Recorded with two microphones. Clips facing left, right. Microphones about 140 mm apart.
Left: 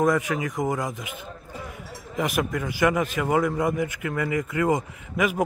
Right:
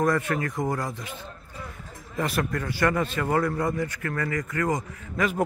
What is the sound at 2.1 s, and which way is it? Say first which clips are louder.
A man's voice: left 2 dB; 15° left (ahead or behind).